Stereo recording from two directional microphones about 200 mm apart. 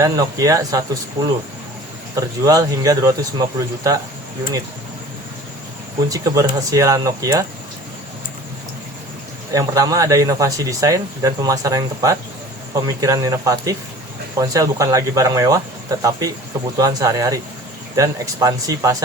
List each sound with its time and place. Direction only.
0.0 s speech: 15° right (ahead or behind)
6.1 s speech: 15° right (ahead or behind)
9.5 s speech: 15° right (ahead or behind)